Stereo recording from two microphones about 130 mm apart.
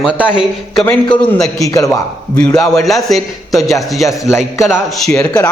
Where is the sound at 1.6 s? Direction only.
25° left (ahead or behind).